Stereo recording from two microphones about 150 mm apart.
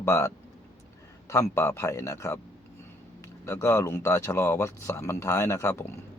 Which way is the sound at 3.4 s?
20° left (ahead or behind).